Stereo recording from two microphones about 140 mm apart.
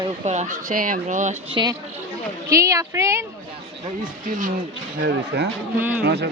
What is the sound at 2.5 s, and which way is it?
Speech, 20° right (ahead or behind).